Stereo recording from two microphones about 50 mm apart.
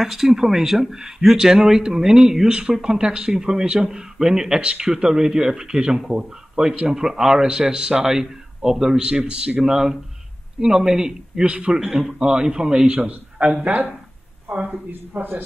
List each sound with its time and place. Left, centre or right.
0.0 s speech: centre; by 14.8 s right
14.9 s a man's voice: right